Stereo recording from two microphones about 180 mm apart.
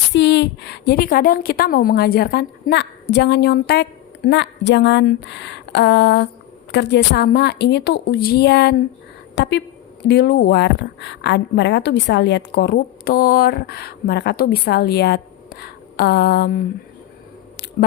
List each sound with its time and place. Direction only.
0.1 s a woman's voice: 70° left (ahead or behind)
4.3 s a woman's voice: 80° left; by 16.6 s 60° left (ahead or behind)